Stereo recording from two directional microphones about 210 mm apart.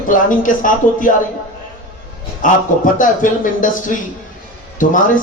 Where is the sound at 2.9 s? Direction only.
40° left (ahead or behind).